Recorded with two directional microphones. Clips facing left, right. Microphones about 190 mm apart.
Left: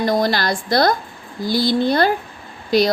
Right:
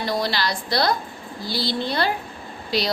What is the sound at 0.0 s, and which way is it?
A woman's voice, 50° left (ahead or behind).